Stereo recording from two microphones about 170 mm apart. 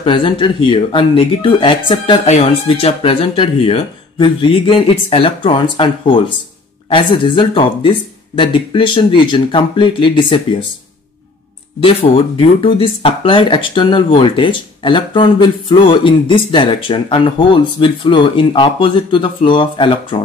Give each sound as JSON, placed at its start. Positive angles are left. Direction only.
{"t": 0.0, "sound": "speech", "side_deg": 30}
{"t": 11.8, "sound": "speech", "side_deg": 30}